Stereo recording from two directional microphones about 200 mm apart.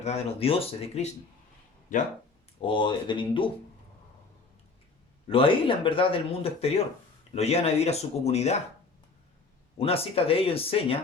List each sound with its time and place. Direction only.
0.0 s speech: 30° left (ahead or behind)
2.6 s speech: 25° left (ahead or behind)
5.3 s speech: 25° left (ahead or behind)
9.7 s speech: 30° left (ahead or behind)